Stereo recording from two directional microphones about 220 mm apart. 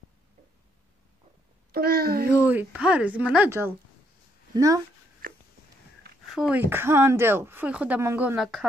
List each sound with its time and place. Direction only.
1.7 s a child's voice: 45° right (ahead or behind)
2.4 s speech: 5° right (ahead or behind)
6.2 s speech: centre (ahead or behind)